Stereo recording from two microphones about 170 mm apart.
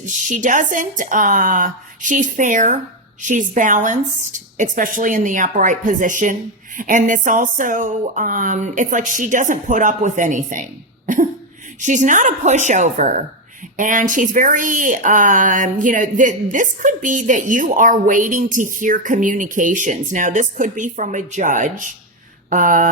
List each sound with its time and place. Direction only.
0.0 s speech: 50° right (ahead or behind)
11.0 s cough: 50° right (ahead or behind)
11.8 s speech: 45° right (ahead or behind)
22.4 s a sound: 50° right (ahead or behind)